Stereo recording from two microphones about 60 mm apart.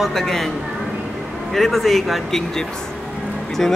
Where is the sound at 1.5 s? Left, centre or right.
Centre.